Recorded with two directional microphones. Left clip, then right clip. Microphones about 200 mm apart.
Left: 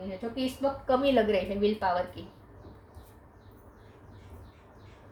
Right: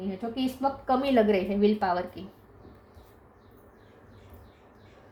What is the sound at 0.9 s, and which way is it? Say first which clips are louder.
A woman's voice: right 1 dB; 45° right (ahead or behind).